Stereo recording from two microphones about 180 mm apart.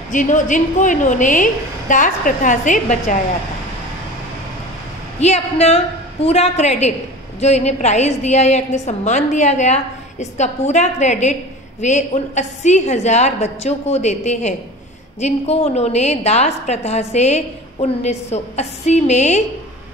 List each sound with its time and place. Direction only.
0.1 s a woman's voice: 45° left (ahead or behind)
5.2 s a woman's voice: 35° left (ahead or behind)